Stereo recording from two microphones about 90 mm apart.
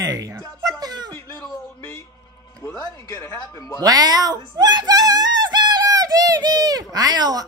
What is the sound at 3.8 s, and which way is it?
Speech, 45° right (ahead or behind).